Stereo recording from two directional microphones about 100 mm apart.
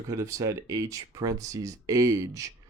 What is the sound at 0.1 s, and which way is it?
Speech, 35° right (ahead or behind).